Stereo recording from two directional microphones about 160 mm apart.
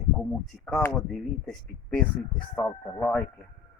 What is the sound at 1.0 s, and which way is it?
Speech, centre (ahead or behind).